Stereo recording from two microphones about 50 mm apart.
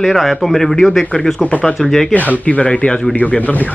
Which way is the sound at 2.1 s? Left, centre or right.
Left.